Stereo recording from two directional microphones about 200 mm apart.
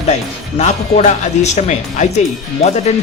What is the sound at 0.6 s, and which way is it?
Speech, 35° left (ahead or behind).